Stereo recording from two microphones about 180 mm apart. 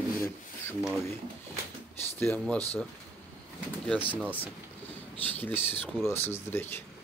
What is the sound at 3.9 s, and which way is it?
Speech, 10° left (ahead or behind).